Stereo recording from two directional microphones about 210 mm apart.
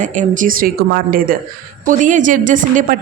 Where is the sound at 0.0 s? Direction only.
35° right (ahead or behind).